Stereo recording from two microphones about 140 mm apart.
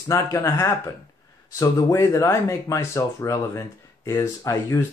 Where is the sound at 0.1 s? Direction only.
20° left (ahead or behind).